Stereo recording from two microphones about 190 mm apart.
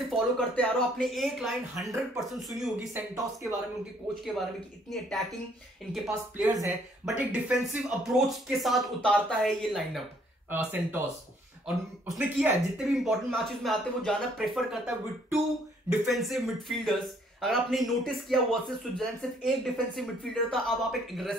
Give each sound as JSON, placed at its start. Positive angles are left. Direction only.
{"t": 0.1, "sound": "a man's voice", "side_deg": 5}
{"t": 2.9, "sound": "speech", "side_deg": -15}
{"t": 4.1, "sound": "a man's voice", "side_deg": 0}
{"t": 6.0, "sound": "a man's voice", "side_deg": -10}
{"t": 12.1, "sound": "a man's voice", "side_deg": -10}